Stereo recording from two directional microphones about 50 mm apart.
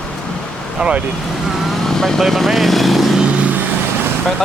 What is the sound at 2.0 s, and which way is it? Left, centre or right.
Speech, centre.